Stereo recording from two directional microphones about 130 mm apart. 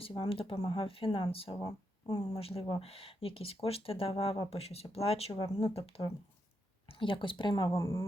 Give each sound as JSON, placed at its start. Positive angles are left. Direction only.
{"t": 0.0, "sound": "speech", "side_deg": 45}
{"t": 1.6, "sound": "speech", "side_deg": 30}
{"t": 2.3, "sound": "speech", "side_deg": 50}
{"t": 7.7, "sound": "speech", "side_deg": 20}